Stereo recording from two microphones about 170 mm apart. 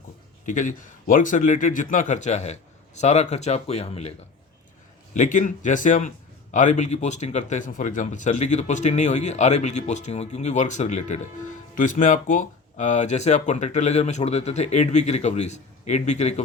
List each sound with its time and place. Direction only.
0.4 s speech: 50° left (ahead or behind)
5.1 s speech: 45° left (ahead or behind)